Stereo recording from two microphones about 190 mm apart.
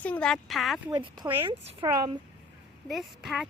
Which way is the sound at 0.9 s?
20° right (ahead or behind).